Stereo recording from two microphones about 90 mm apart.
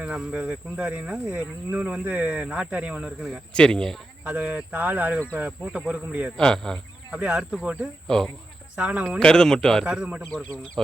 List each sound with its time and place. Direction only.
0.0 s speech: 10° right (ahead or behind)
3.5 s speech: 10° left (ahead or behind)
4.3 s speech: 10° right (ahead or behind)
6.3 s speech: 5° left (ahead or behind)
7.1 s speech: 10° right (ahead or behind)
8.0 s speech: 5° left (ahead or behind)
8.7 s speech: 10° right (ahead or behind)
9.0 s speech: 5° left (ahead or behind)
9.8 s speech: 15° right (ahead or behind)
10.8 s speech: 5° left (ahead or behind)